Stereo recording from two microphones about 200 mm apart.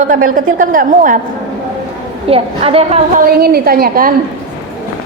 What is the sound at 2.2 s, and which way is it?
Speech, 30° right (ahead or behind).